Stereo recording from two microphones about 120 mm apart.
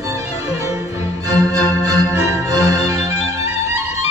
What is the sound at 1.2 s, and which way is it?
Music, 30° right (ahead or behind).